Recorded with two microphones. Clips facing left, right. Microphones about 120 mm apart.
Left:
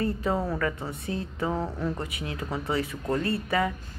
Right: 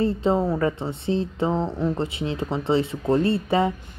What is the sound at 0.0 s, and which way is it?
Speech, 25° right (ahead or behind).